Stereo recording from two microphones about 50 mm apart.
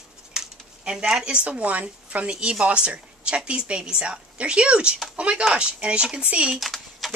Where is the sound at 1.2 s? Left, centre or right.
Right.